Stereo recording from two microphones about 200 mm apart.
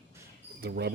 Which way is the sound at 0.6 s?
55° right (ahead or behind).